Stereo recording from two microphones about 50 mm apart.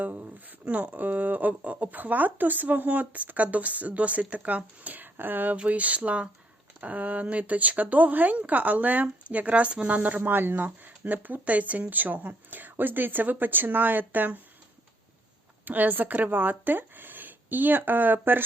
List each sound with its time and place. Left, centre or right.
0.0 s speech: right
5.5 s speech: right
15.6 s speech: right